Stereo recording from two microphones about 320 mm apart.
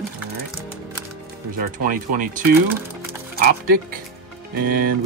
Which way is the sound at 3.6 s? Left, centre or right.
Right.